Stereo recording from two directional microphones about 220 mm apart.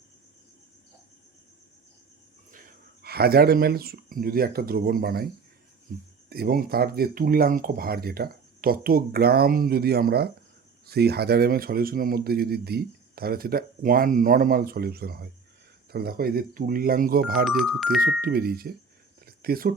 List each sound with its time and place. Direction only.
3.0 s speech: 45° right (ahead or behind)
6.2 s speech: 45° right (ahead or behind)
17.4 s speech: centre (ahead or behind)
18.2 s speech: 45° right (ahead or behind)
19.2 s a sound: 45° right (ahead or behind)